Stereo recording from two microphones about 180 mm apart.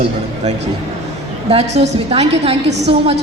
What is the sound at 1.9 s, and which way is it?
A man's voice, 35° right (ahead or behind).